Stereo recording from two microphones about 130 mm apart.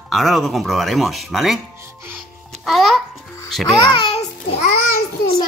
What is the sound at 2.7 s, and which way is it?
Speech, centre (ahead or behind).